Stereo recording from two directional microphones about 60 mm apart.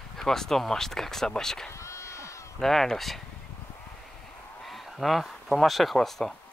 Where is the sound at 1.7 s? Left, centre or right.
Left.